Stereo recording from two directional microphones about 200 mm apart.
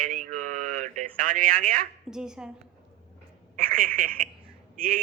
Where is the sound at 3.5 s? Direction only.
45° right (ahead or behind).